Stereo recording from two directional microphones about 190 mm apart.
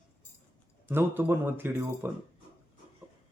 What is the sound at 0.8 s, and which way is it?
Speech, 10° right (ahead or behind).